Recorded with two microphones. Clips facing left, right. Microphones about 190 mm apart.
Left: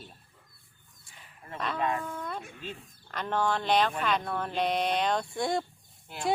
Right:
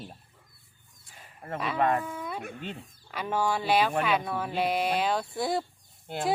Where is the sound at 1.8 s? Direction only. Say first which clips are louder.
Right 5 dB; 55° right (ahead or behind).